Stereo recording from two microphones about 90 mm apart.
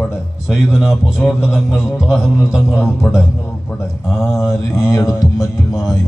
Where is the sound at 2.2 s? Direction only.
30° left (ahead or behind).